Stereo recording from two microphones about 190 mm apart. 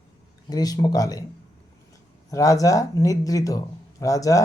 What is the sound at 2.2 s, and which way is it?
Speech, 15° left (ahead or behind).